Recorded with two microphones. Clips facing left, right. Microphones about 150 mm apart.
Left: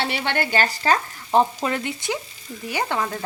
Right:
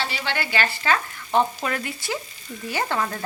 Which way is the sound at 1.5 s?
25° left (ahead or behind).